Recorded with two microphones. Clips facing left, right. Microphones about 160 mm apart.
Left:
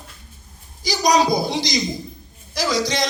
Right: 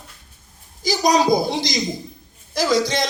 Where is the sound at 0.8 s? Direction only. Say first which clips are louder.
Even; 50° right (ahead or behind).